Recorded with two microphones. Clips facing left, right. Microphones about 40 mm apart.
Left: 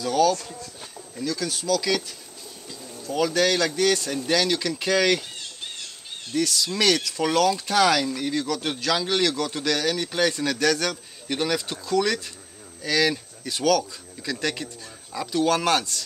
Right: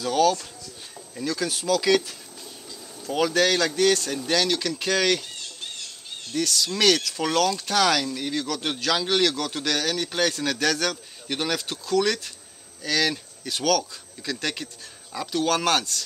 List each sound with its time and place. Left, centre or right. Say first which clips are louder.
1.1 s speech: right 1 dB; centre
3.3 s a man's voice: even; centre
6.3 s a man's voice: left 1 dB; centre